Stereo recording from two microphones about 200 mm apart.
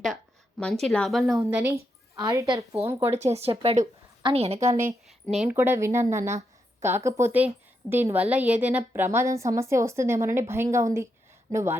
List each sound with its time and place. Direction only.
0.6 s speech: centre (ahead or behind)
1.4 s a woman's voice: 10° right (ahead or behind)
3.1 s a woman's voice: 30° right (ahead or behind)
5.4 s a woman's voice: 10° right (ahead or behind)